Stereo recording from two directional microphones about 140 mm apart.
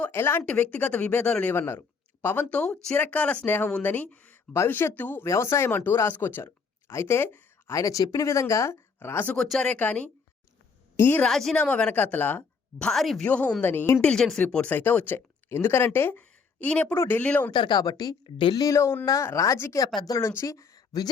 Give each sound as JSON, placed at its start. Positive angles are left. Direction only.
{"t": 0.0, "sound": "speech", "side_deg": 15}
{"t": 11.3, "sound": "speech", "side_deg": 0}
{"t": 12.8, "sound": "speech", "side_deg": 0}
{"t": 14.1, "sound": "speech", "side_deg": 5}
{"t": 17.5, "sound": "speech", "side_deg": 35}
{"t": 18.6, "sound": "speech", "side_deg": 20}